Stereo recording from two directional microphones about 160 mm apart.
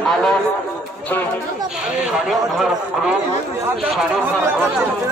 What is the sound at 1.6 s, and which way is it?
A man's voice, 5° right (ahead or behind).